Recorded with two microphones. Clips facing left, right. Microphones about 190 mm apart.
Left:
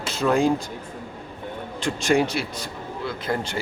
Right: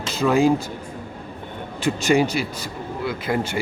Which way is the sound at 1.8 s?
Centre (ahead or behind).